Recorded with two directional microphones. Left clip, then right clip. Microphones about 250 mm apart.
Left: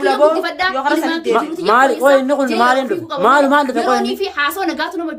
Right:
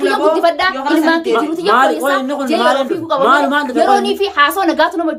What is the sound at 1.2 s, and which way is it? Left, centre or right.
A woman's voice, centre.